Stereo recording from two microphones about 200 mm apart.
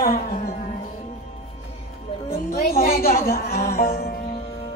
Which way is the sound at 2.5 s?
50° left (ahead or behind).